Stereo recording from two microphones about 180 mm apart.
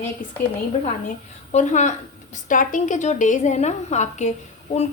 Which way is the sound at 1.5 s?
40° left (ahead or behind).